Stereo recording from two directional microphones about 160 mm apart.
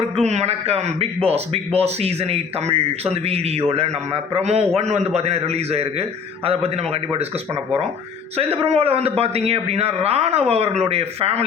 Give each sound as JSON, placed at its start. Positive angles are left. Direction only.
{"t": 0.2, "sound": "a man's voice", "side_deg": -45}
{"t": 8.4, "sound": "a man's voice", "side_deg": -40}